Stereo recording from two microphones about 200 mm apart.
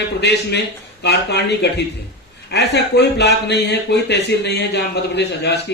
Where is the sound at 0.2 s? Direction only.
60° left (ahead or behind).